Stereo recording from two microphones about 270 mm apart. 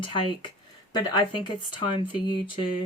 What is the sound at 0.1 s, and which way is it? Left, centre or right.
Speech, centre.